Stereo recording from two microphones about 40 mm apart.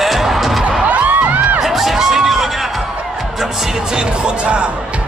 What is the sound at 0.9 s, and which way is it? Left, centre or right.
Crowd, right.